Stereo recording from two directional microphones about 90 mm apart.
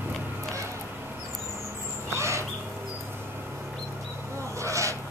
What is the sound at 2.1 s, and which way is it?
Crow, 35° right (ahead or behind).